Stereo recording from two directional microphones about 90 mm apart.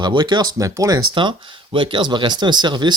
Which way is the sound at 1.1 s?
65° right (ahead or behind).